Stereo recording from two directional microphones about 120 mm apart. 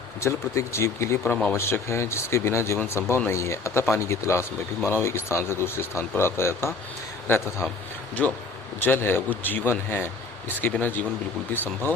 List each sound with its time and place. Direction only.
0.2 s speech: 25° left (ahead or behind)
1.3 s speech: 10° left (ahead or behind)
1.5 s speech: 20° left (ahead or behind)
8.2 s speech: 10° left (ahead or behind)
8.8 s speech: 20° left (ahead or behind)